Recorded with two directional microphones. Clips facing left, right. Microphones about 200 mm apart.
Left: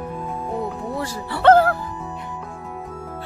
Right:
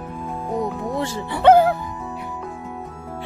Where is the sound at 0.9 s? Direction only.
20° right (ahead or behind).